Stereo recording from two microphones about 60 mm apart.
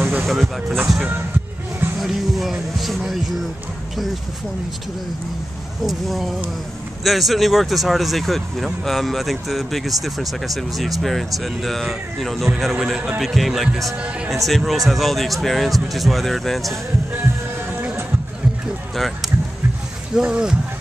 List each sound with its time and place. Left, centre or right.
0.0 s a sound: right
0.3 s speech: centre
2.0 s speech: centre
5.9 s a man's voice: centre
18.9 s speech: centre
20.2 s a man's voice: centre